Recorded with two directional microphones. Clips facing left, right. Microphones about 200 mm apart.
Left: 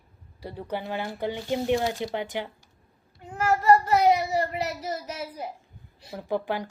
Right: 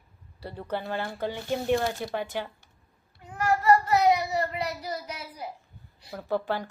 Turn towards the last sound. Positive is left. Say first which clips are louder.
# even
turn(degrees=15)  # may be behind; listen again after turning